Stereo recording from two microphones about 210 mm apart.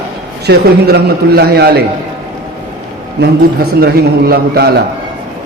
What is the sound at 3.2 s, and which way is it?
A man's voice, 50° right (ahead or behind).